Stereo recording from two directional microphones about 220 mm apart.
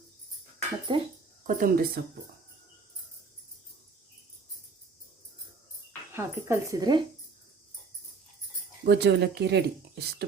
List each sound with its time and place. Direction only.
0.9 s speech: 20° right (ahead or behind)
1.5 s a woman's voice: 40° right (ahead or behind)
6.1 s speech: 10° right (ahead or behind)
8.8 s speech: 50° right (ahead or behind)